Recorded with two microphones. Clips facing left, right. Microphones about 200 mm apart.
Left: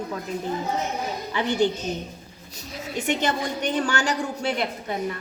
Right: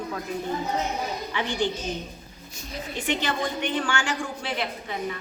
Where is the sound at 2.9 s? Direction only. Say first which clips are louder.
Left 3 dB; 40° left (ahead or behind).